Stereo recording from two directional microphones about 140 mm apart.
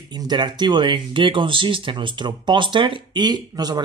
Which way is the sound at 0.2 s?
30° right (ahead or behind).